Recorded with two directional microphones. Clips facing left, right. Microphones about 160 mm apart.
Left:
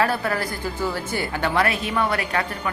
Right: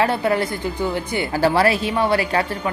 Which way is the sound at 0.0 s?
25° right (ahead or behind).